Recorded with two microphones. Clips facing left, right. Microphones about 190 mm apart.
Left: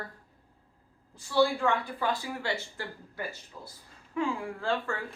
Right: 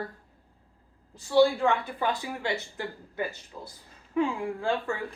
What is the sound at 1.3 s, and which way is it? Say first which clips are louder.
Speech: right 4 dB; 20° right (ahead or behind).